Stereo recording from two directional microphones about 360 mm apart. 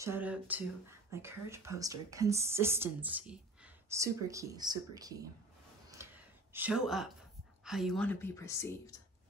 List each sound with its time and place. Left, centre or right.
0.0 s speech: centre
6.0 s gasp: centre
6.5 s a woman's voice: centre